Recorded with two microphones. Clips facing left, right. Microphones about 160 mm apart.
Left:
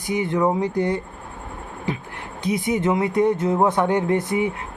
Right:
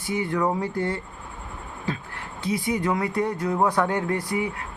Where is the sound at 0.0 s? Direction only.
20° left (ahead or behind).